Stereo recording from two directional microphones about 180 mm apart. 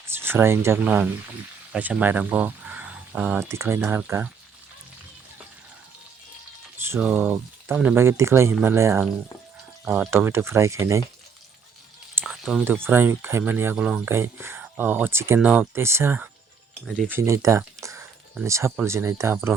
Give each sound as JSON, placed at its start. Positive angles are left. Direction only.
{"t": 0.0, "sound": "speech", "side_deg": -15}
{"t": 6.9, "sound": "speech", "side_deg": -5}
{"t": 12.1, "sound": "speech", "side_deg": -5}